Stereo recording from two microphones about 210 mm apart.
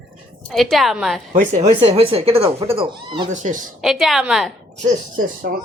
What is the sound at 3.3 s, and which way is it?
Speech, 35° right (ahead or behind).